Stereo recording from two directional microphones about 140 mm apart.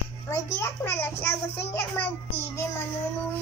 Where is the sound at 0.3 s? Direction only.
20° left (ahead or behind).